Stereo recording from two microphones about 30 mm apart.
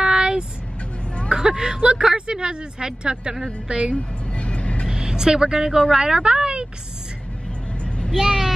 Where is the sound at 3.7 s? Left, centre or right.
Right.